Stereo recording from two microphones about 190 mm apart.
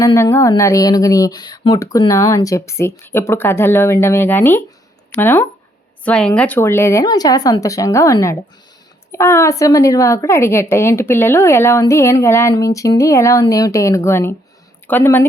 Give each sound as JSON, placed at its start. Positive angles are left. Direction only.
{"t": 0.0, "sound": "a woman's voice", "side_deg": 15}